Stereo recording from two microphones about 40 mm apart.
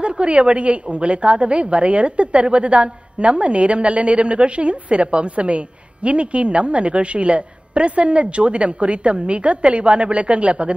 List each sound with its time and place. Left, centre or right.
0.0 s a woman's voice: right